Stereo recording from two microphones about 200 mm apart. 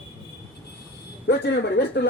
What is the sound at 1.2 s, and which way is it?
Speech, 60° left (ahead or behind).